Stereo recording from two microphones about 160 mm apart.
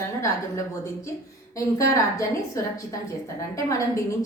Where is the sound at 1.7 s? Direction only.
20° left (ahead or behind).